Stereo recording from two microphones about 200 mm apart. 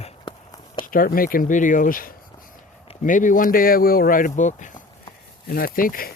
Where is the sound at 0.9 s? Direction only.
45° left (ahead or behind).